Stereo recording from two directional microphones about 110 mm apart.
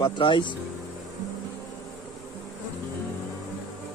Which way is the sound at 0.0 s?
50° left (ahead or behind).